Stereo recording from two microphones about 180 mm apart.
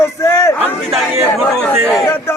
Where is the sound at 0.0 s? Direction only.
15° left (ahead or behind).